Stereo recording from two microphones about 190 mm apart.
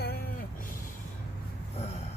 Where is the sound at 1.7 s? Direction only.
35° left (ahead or behind).